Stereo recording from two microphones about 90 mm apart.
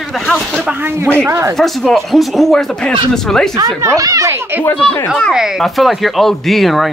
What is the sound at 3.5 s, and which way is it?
Speech, 35° right (ahead or behind).